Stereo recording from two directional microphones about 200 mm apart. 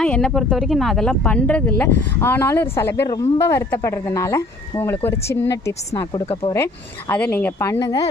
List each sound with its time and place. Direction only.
0.0 s speech: 5° left (ahead or behind)
6.2 s speech: 30° left (ahead or behind)
7.1 s speech: 10° left (ahead or behind)